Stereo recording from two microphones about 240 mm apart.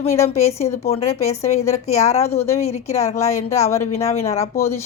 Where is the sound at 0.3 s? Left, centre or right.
Centre.